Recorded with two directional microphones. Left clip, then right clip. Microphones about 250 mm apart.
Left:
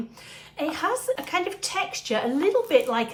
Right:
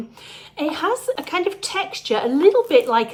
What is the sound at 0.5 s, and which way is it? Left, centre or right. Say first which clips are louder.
Speech: right 4 dB; right.